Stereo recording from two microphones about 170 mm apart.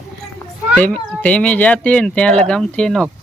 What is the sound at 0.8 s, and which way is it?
Speech, 5° left (ahead or behind).